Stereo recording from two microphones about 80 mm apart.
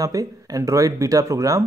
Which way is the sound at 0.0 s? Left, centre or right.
Right.